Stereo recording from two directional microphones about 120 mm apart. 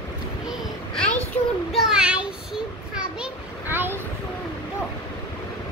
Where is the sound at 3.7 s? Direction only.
15° right (ahead or behind).